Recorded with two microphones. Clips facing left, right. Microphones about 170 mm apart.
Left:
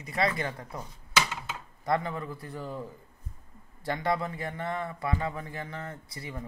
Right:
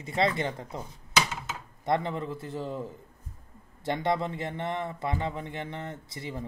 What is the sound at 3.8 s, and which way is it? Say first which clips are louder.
Speech: right 2 dB; 25° right (ahead or behind).